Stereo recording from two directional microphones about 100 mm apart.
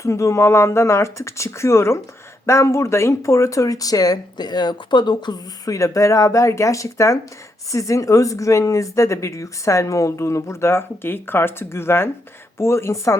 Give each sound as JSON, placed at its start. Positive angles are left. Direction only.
{"t": 0.0, "sound": "speech", "side_deg": 30}